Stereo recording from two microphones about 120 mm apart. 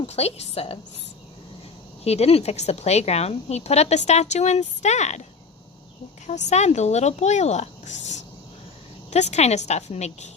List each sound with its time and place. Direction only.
0.0 s a woman's voice: 60° left (ahead or behind)
2.0 s speech: 60° left (ahead or behind)
6.2 s speech: 70° left (ahead or behind)